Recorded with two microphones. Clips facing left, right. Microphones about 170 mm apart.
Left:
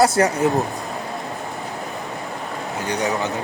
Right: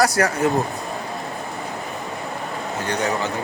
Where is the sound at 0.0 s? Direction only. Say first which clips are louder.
Left 2 dB; 25° left (ahead or behind).